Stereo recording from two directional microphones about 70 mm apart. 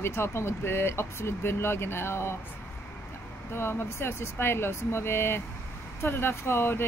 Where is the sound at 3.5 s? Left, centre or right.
Left.